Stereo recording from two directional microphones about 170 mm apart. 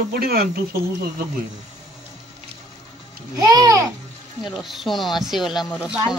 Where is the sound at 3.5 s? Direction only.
20° right (ahead or behind).